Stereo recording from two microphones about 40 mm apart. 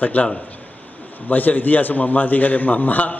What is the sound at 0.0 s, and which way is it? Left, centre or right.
Speech, left.